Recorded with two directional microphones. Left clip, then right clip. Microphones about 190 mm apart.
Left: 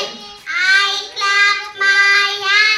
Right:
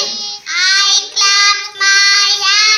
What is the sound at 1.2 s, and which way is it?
Child singing, 30° right (ahead or behind).